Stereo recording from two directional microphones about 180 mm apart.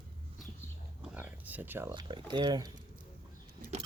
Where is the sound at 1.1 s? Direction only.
10° right (ahead or behind).